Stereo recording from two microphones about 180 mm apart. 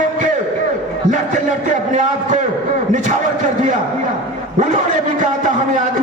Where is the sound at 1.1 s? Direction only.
45° right (ahead or behind).